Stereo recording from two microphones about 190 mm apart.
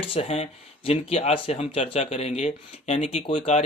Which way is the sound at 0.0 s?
30° left (ahead or behind).